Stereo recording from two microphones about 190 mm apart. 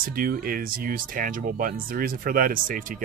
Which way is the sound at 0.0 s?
50° right (ahead or behind).